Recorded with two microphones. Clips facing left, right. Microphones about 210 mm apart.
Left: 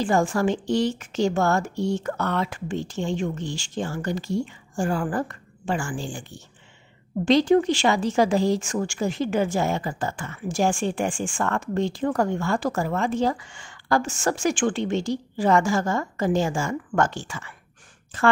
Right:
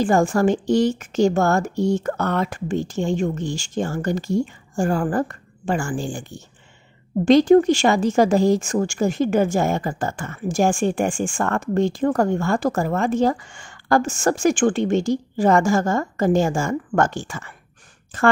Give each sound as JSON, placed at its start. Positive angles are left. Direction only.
{"t": 0.0, "sound": "a woman's voice", "side_deg": -45}